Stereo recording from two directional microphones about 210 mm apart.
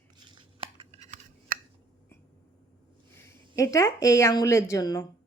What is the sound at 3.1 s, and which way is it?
Speech, 15° left (ahead or behind).